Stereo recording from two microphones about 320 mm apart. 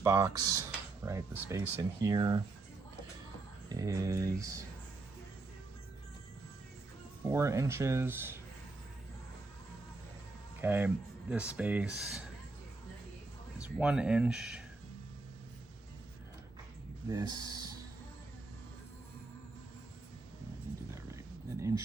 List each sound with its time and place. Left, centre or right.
0.0 s speech: centre
3.7 s speech: centre
7.3 s speech: centre
10.6 s speech: centre
13.6 s speech: centre
17.1 s speech: centre